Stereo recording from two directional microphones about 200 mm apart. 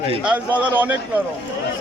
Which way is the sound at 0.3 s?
10° right (ahead or behind).